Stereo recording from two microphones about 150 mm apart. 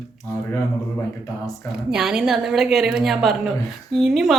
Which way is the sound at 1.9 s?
5° right (ahead or behind).